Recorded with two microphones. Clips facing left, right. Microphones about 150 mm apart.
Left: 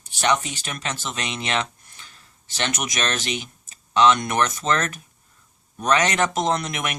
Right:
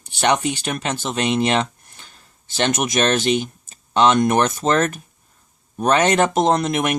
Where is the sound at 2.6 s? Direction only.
50° right (ahead or behind).